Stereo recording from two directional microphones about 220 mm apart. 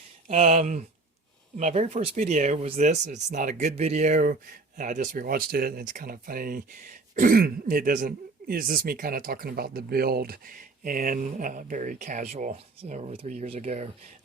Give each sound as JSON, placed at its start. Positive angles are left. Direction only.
{"t": 0.3, "sound": "speech", "side_deg": -30}